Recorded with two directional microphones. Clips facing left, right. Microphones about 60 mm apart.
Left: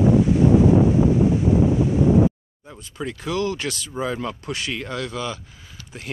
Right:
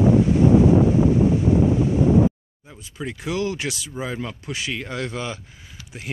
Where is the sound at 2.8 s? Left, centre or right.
Centre.